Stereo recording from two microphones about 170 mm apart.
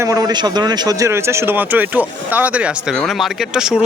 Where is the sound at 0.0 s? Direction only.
20° right (ahead or behind).